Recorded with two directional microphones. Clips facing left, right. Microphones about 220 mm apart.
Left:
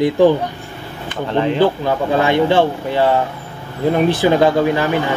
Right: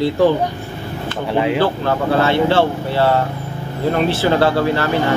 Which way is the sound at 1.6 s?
15° left (ahead or behind).